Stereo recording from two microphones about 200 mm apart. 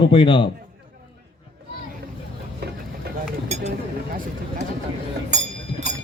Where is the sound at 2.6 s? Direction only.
55° right (ahead or behind).